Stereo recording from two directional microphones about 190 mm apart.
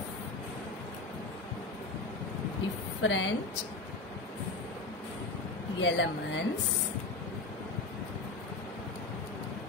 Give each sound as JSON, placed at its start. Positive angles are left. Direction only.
{"t": 3.0, "sound": "a woman's voice", "side_deg": 80}
{"t": 5.8, "sound": "a woman's voice", "side_deg": 70}